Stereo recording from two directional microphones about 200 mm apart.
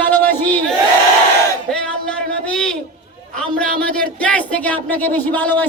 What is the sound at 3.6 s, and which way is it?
Music, 5° left (ahead or behind).